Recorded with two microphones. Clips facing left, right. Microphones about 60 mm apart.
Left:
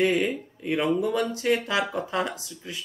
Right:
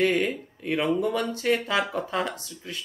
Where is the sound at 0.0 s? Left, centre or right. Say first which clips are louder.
Even; centre.